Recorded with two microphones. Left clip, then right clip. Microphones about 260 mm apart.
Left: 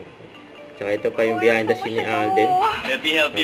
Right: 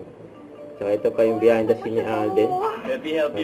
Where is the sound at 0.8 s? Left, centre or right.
Left.